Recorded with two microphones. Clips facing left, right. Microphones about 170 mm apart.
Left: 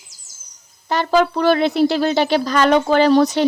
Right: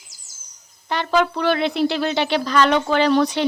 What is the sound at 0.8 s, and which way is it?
Speech, 40° left (ahead or behind).